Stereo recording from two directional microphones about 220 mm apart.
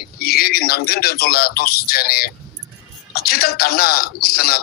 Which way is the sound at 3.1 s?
45° left (ahead or behind).